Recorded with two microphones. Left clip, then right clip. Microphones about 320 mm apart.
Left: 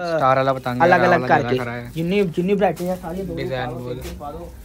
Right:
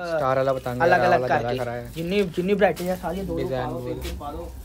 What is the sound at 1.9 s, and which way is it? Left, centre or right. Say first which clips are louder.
Speech: left 5 dB; centre.